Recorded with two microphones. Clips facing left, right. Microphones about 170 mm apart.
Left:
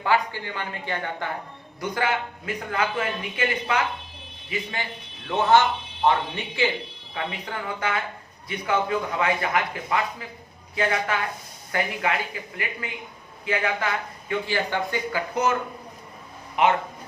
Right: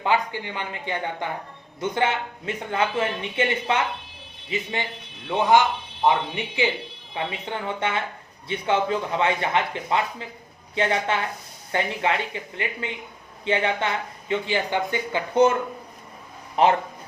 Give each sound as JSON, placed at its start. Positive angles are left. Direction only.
{"t": 0.0, "sound": "speech", "side_deg": -20}
{"t": 5.3, "sound": "speech", "side_deg": -15}
{"t": 16.6, "sound": "speech", "side_deg": -35}